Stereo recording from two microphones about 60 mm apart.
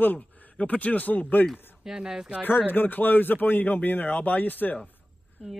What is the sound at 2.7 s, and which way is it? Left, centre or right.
Speech, left.